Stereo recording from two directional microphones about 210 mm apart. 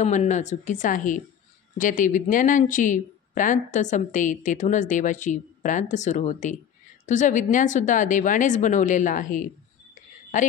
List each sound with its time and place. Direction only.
0.0 s speech: 35° left (ahead or behind)